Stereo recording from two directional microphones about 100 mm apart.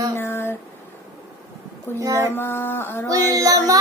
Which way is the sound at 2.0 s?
30° right (ahead or behind).